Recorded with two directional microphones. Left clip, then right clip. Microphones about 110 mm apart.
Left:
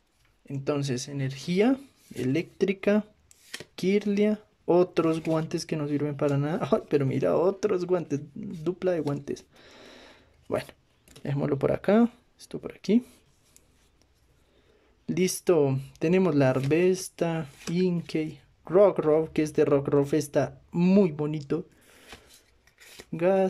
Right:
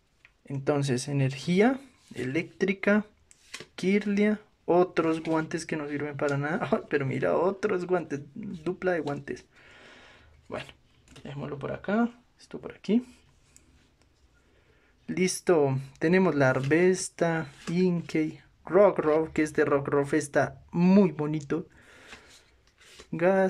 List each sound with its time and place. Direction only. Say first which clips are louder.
0.5 s speech: right 2 dB; 5° left (ahead or behind)
1.6 s speech: even; 15° left (ahead or behind)
9.6 s gasp: left 2 dB; 40° left (ahead or behind)
11.2 s speech: left 9 dB; 65° left (ahead or behind)
12.4 s speech: left 6 dB; 25° left (ahead or behind)
15.0 s speech: left 1 dB; 20° left (ahead or behind)
22.9 s a sound: even; 15° left (ahead or behind)